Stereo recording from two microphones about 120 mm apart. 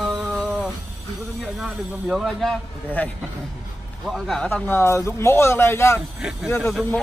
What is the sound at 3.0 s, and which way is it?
Speech, 15° left (ahead or behind).